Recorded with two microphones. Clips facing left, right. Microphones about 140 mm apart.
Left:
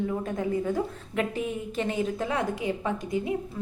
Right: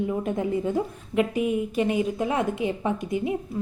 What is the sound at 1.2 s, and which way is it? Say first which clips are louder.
A woman's voice: right 6 dB; 15° right (ahead or behind).